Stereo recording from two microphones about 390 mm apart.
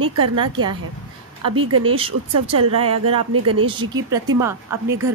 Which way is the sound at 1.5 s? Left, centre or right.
Right.